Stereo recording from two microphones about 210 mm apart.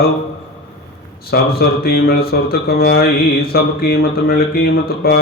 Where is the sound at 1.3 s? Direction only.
45° left (ahead or behind).